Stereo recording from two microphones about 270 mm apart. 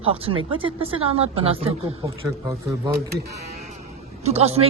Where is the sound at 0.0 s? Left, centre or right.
Right.